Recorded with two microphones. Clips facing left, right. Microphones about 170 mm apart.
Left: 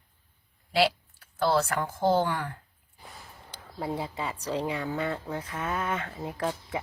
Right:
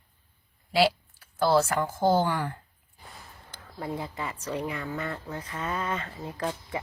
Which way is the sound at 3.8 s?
15° left (ahead or behind).